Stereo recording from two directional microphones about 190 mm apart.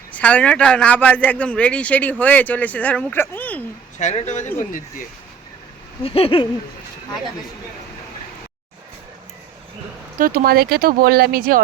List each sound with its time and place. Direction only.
0.1 s speech: 5° left (ahead or behind)
3.9 s speech: 40° left (ahead or behind)
6.0 s a sound: 30° left (ahead or behind)
10.2 s speech: 50° right (ahead or behind)